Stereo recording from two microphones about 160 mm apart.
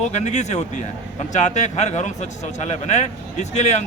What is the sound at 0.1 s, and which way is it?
A man's voice, 45° left (ahead or behind).